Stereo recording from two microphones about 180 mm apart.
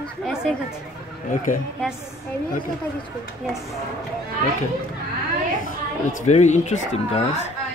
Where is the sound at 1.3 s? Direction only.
45° left (ahead or behind).